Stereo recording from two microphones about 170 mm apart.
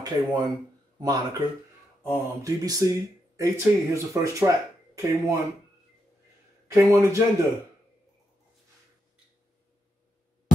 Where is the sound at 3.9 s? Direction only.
15° right (ahead or behind).